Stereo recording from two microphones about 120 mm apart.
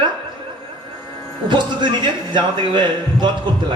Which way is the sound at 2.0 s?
40° right (ahead or behind).